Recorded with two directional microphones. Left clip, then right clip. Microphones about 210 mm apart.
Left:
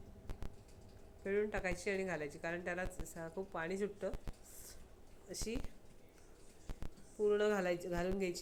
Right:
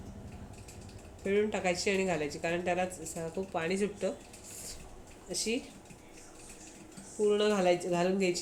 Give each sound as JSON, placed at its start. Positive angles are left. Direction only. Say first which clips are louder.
{"t": 1.2, "sound": "speech", "louder": "right 7 dB", "side_deg": 5}
{"t": 5.3, "sound": "speech", "louder": "right 10 dB", "side_deg": 15}
{"t": 7.3, "sound": "speech", "louder": "right 7 dB", "side_deg": 10}